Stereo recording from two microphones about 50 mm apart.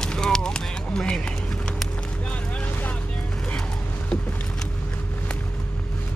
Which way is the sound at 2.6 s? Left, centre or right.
Left.